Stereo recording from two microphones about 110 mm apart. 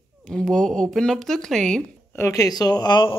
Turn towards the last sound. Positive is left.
turn(degrees=45)  # may be behind; listen again after turning